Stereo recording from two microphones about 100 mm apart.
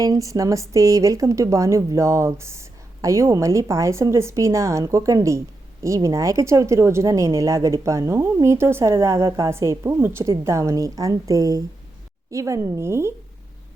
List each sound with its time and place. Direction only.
0.0 s speech: 35° right (ahead or behind)